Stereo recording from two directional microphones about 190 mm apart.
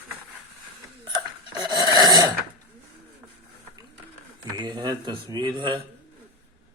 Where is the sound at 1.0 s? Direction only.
20° right (ahead or behind).